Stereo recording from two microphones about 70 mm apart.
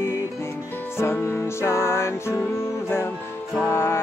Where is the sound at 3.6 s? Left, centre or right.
Left.